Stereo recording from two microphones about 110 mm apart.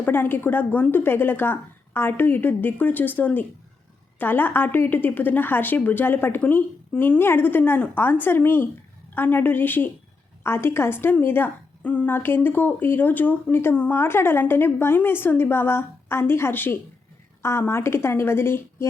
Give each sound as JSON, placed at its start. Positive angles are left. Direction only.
{"t": 0.0, "sound": "a woman's voice", "side_deg": 20}